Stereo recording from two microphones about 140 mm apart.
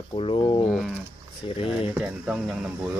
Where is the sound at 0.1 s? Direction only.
40° left (ahead or behind).